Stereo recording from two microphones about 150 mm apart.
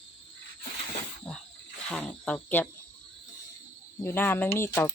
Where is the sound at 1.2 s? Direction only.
5° left (ahead or behind).